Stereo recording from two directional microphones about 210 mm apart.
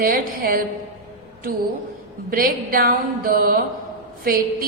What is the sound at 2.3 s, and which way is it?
A woman's voice, 45° right (ahead or behind).